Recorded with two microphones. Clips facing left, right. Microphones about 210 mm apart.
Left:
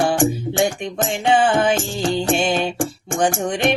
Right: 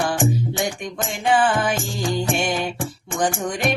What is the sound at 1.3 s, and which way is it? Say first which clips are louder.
Music: left 2 dB; 25° left (ahead or behind).